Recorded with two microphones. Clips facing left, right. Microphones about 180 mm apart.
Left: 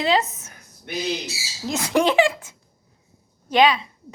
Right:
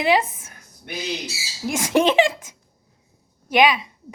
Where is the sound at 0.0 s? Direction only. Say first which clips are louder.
Right 2 dB; 15° right (ahead or behind).